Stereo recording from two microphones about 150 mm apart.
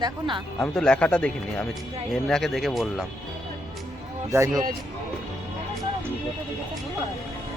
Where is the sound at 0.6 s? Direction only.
5° left (ahead or behind).